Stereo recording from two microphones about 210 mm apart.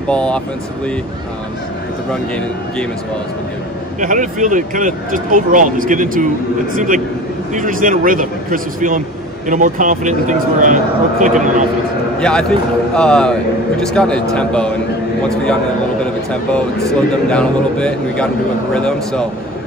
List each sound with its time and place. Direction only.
0.1 s speech: 5° left (ahead or behind)
4.0 s speech: 40° right (ahead or behind)
7.5 s speech: 40° right (ahead or behind)
12.2 s speech: 5° left (ahead or behind)
16.0 s speech: 5° left (ahead or behind)